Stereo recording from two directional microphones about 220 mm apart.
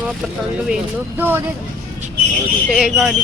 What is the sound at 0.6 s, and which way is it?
Speech, 5° right (ahead or behind).